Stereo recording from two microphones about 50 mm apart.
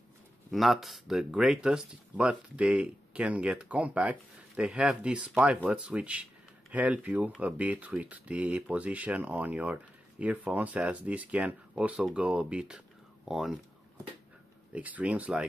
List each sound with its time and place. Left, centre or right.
0.5 s speech: centre
1.3 s speech: centre
13.2 s speech: centre
14.7 s speech: right